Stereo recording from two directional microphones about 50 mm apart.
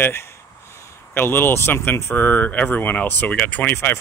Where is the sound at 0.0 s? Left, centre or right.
Left.